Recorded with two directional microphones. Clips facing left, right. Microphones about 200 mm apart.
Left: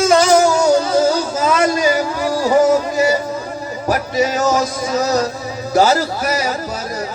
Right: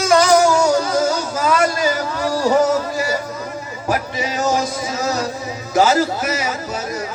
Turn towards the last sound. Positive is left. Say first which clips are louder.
# left 1 dB
turn(degrees=40)  # may be behind; listen again after turning